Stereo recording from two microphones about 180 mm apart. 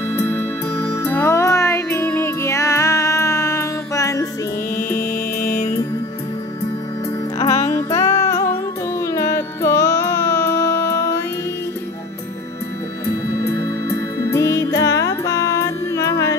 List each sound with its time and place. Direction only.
0.3 s music: 10° left (ahead or behind)
4.7 s music: 50° left (ahead or behind)
7.3 s music: 15° left (ahead or behind)
13.5 s music: 15° left (ahead or behind)